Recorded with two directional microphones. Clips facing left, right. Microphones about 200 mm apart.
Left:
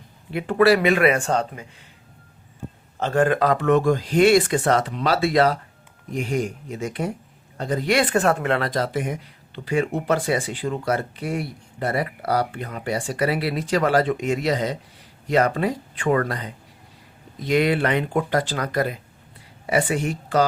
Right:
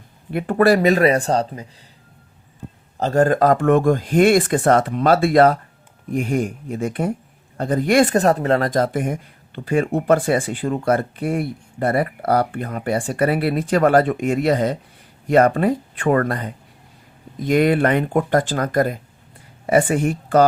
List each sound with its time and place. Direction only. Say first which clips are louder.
0.3 s speech: right 1 dB; 50° right (ahead or behind)
3.0 s speech: right 4 dB; 40° right (ahead or behind)